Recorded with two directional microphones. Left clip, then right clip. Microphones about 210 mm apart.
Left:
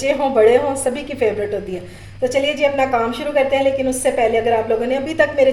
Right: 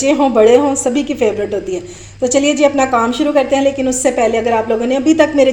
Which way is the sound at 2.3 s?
35° right (ahead or behind).